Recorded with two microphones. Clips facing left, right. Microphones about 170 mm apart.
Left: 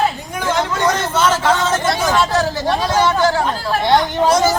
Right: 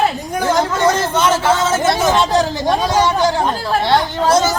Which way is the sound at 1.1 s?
15° right (ahead or behind).